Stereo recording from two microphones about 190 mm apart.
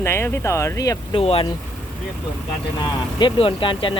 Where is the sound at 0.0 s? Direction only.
15° left (ahead or behind).